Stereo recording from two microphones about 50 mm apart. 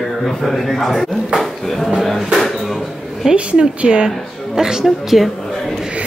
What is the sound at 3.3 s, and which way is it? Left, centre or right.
A woman's voice, right.